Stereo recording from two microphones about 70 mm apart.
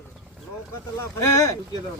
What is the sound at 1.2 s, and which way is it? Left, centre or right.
Speech, left.